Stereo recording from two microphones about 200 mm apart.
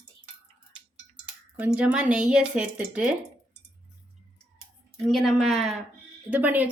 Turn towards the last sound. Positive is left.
turn(degrees=-10)  # may be behind; listen again after turning